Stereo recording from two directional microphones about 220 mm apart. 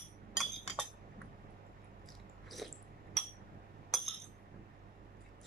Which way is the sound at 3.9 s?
Centre (ahead or behind).